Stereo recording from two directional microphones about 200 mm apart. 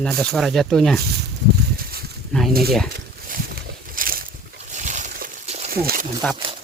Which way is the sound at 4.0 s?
45° right (ahead or behind).